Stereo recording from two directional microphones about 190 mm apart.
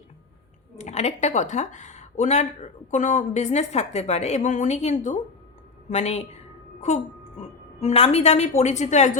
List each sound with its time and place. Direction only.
0.8 s a woman's voice: 35° left (ahead or behind)